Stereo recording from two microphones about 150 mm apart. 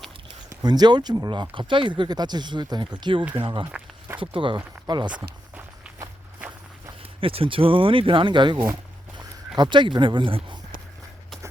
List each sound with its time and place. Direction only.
0.5 s speech: 25° right (ahead or behind)
3.7 s walk: 5° right (ahead or behind)
4.2 s speech: 35° right (ahead or behind)
5.5 s walk: 10° right (ahead or behind)
7.2 s speech: 35° right (ahead or behind)